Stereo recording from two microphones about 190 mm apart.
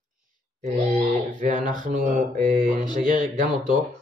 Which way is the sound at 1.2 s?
45° right (ahead or behind).